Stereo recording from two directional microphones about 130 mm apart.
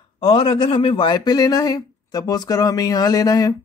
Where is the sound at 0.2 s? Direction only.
50° left (ahead or behind).